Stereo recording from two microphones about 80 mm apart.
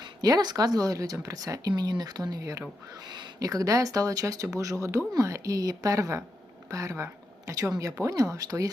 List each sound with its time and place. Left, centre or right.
0.0 s speech: right